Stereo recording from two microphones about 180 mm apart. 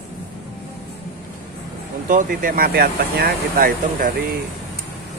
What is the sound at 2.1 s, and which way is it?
Speech, 50° right (ahead or behind).